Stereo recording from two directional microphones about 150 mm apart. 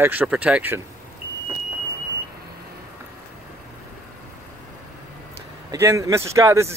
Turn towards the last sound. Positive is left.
turn(degrees=-20)  # may be behind; listen again after turning